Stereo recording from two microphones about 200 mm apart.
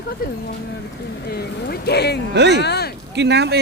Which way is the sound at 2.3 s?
60° right (ahead or behind).